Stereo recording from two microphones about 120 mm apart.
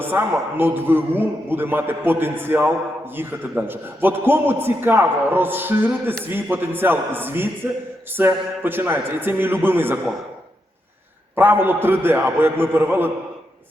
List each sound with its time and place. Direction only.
0.0 s a man's voice: 20° right (ahead or behind)
11.3 s a man's voice: 15° right (ahead or behind)